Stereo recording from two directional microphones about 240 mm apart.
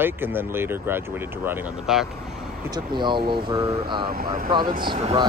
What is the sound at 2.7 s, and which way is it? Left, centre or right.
Speech, centre.